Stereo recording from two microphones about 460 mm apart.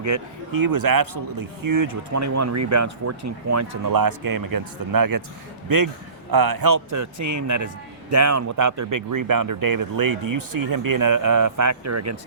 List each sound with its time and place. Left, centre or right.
0.0 s a man's voice: right